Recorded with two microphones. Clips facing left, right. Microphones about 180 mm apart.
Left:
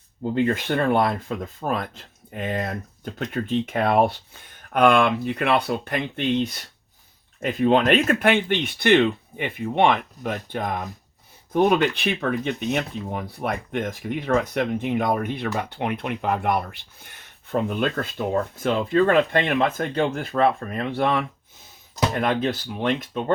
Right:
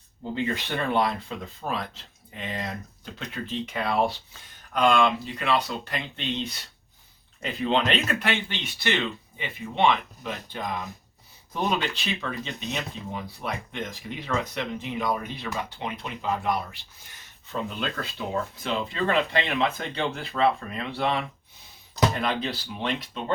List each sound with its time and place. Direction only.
0.3 s speech: 50° left (ahead or behind)
7.3 s speech: 50° left (ahead or behind)